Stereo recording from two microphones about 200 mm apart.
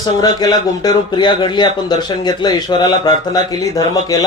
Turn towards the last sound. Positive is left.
turn(degrees=20)  # may be behind; listen again after turning